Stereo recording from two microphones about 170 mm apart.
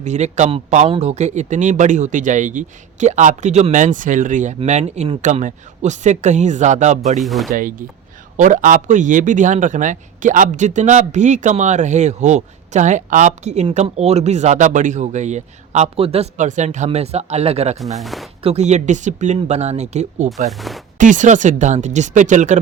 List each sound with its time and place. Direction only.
0.0 s speech: 45° right (ahead or behind)
7.2 s speech: centre (ahead or behind)
8.4 s speech: 45° right (ahead or behind)
17.7 s speech: centre (ahead or behind)
18.4 s speech: 40° right (ahead or behind)
20.5 s speech: centre (ahead or behind)
21.0 s speech: 50° right (ahead or behind)